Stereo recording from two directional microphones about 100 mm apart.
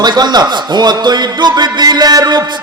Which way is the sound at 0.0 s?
45° right (ahead or behind).